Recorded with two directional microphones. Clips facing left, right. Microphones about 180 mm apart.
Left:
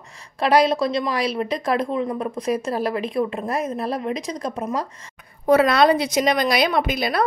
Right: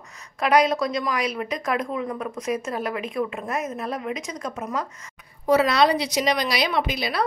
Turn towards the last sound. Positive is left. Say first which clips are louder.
# left 3 dB
turn(degrees=50)  # may be behind; listen again after turning